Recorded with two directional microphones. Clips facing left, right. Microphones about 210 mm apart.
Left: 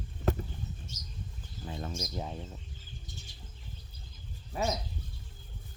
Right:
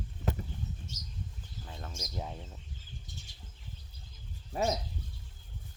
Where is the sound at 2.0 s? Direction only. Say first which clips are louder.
Left 3 dB; 5° right (ahead or behind).